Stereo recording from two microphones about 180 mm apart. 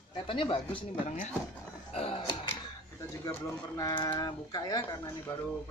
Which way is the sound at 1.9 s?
30° left (ahead or behind).